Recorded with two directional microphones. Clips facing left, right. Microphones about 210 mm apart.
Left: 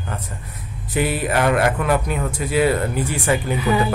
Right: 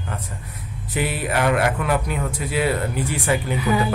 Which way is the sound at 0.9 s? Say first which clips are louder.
Left 3 dB; 45° left (ahead or behind).